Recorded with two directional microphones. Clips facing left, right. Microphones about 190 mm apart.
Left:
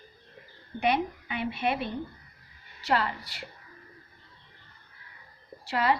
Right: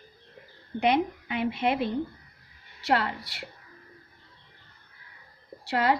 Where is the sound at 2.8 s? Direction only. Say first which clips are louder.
Right 2 dB; 80° right.